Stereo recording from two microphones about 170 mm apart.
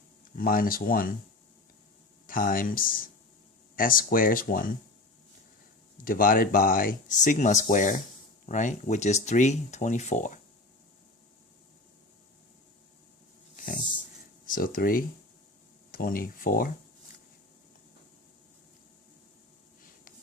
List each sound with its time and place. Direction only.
0.3 s speech: 55° left (ahead or behind)
2.2 s speech: 55° left (ahead or behind)
6.1 s speech: 55° left (ahead or behind)
13.6 s a sound: 50° left (ahead or behind)
14.4 s speech: 55° left (ahead or behind)